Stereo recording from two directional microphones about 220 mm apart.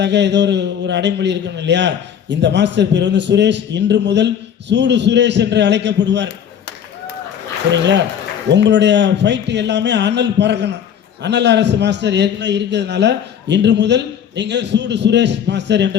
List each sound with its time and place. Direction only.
0.0 s a man's voice: 50° right (ahead or behind)
8.4 s a man's voice: 55° right (ahead or behind)